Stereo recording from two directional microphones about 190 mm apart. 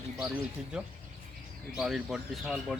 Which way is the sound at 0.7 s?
5° right (ahead or behind).